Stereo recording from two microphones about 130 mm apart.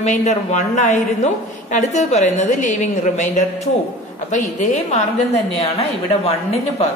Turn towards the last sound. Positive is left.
turn(degrees=50)  # may be behind; listen again after turning